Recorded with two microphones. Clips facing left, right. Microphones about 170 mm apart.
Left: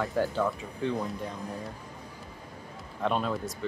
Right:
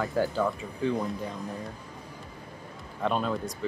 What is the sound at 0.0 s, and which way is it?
Speech, centre (ahead or behind).